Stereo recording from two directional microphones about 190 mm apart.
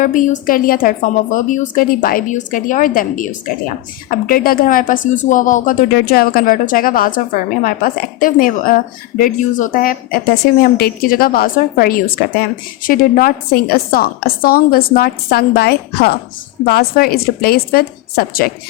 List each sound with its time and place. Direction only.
0.0 s a woman's voice: 45° left (ahead or behind)